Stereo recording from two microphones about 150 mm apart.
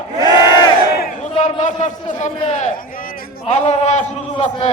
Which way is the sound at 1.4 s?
55° left (ahead or behind).